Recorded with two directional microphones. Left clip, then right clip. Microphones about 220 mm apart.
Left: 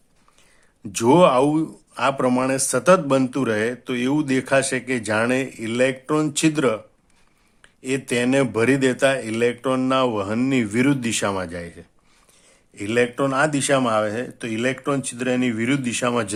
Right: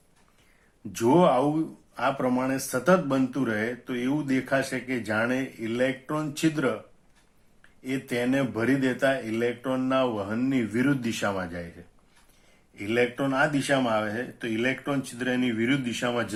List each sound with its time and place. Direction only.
0.9 s speech: 45° left (ahead or behind)
7.8 s speech: 45° left (ahead or behind)
12.7 s speech: 45° left (ahead or behind)